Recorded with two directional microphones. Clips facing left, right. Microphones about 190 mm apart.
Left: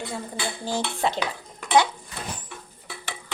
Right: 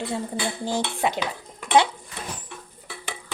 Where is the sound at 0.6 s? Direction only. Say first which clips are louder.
Even; 15° right (ahead or behind).